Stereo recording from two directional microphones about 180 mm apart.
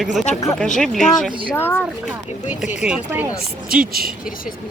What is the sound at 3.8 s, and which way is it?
Speech, 55° right (ahead or behind).